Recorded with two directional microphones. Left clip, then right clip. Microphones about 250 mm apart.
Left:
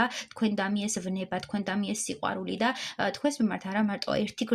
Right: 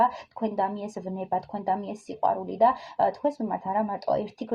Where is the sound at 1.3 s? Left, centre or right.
Left.